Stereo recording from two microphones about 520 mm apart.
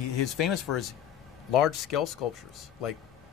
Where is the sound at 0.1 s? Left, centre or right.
Left.